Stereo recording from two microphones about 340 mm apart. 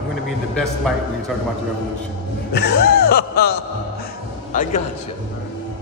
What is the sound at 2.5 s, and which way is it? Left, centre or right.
Music, left.